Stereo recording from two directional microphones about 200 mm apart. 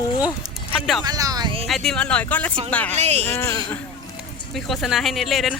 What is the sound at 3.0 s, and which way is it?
Speech, 35° right (ahead or behind).